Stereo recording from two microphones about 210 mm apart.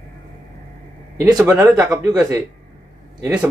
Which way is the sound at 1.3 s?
15° right (ahead or behind).